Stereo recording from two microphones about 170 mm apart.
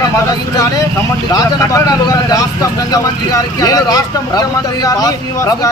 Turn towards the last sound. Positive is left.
turn(degrees=20)  # may be behind; listen again after turning